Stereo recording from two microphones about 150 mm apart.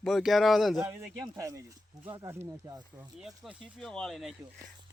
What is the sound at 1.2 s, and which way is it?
Speech, 20° right (ahead or behind).